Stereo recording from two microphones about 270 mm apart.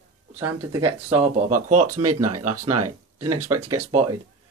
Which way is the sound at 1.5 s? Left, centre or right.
Right.